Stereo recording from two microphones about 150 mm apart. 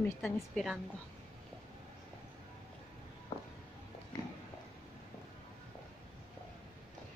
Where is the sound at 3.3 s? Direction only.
35° left (ahead or behind).